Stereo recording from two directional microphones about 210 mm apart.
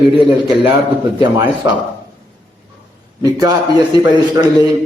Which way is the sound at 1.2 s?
15° right (ahead or behind).